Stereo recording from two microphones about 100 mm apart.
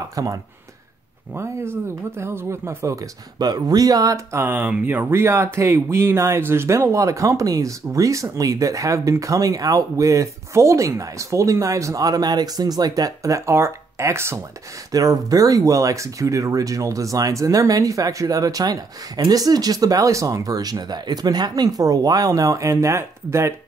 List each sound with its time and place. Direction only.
0.1 s speech: 35° right (ahead or behind)
1.3 s speech: 25° right (ahead or behind)
3.3 s speech: 40° right (ahead or behind)
14.9 s speech: 40° right (ahead or behind)